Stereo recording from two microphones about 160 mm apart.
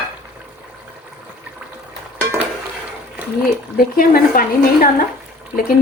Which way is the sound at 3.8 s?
65° left (ahead or behind).